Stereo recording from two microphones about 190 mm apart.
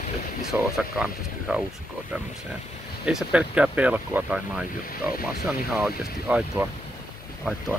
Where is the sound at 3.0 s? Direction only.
5° right (ahead or behind).